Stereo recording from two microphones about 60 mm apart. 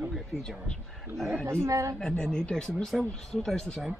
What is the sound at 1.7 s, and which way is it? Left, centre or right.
Speech, right.